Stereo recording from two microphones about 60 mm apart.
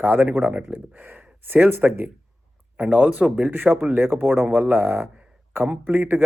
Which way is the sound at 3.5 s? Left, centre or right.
Right.